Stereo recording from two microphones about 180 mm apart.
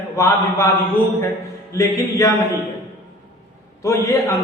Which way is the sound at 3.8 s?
15° left (ahead or behind).